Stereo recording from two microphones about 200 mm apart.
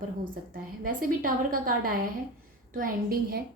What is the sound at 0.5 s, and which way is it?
A woman's voice, 45° right (ahead or behind).